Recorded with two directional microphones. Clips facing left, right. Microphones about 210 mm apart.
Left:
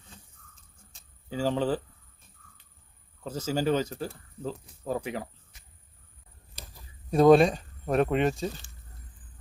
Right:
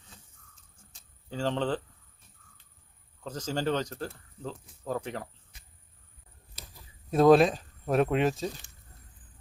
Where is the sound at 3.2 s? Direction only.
10° left (ahead or behind).